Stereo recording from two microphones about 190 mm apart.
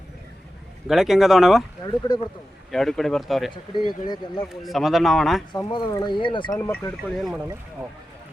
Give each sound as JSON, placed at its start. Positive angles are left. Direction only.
{"t": 0.9, "sound": "speech", "side_deg": 0}
{"t": 2.7, "sound": "speech", "side_deg": 0}
{"t": 4.0, "sound": "speech", "side_deg": 20}
{"t": 4.6, "sound": "speech", "side_deg": 0}
{"t": 5.5, "sound": "speech", "side_deg": 25}
{"t": 6.6, "sound": "speech", "side_deg": 10}
{"t": 7.2, "sound": "speech", "side_deg": -5}